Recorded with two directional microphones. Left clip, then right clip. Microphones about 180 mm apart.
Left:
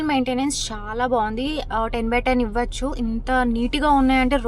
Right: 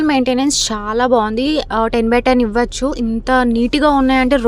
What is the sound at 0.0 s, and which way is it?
A woman's voice, 35° right (ahead or behind).